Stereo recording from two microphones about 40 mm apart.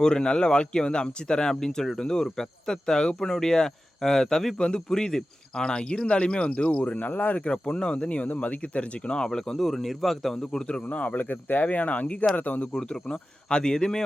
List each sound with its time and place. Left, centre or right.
0.0 s speech: left
7.4 s speech: left
9.1 s speech: centre
10.3 s speech: centre
10.8 s speech: left
11.2 s speech: left
12.8 s speech: left